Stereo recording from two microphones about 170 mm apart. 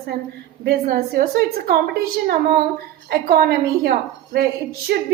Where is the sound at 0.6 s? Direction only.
65° right (ahead or behind).